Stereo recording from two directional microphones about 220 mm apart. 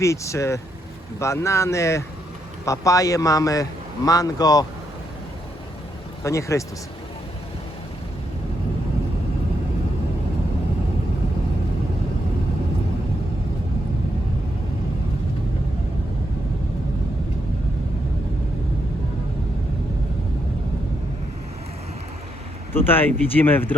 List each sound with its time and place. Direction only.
0.0 s a man's voice: 15° left (ahead or behind)
6.2 s a man's voice: 15° left (ahead or behind)
22.7 s a man's voice: 10° left (ahead or behind)